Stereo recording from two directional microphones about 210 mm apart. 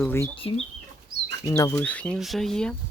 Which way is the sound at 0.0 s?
10° left (ahead or behind).